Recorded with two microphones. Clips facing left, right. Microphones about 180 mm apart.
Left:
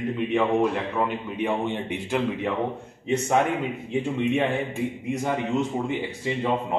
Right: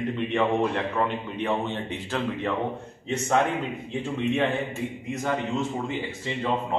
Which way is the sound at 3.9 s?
15° left (ahead or behind).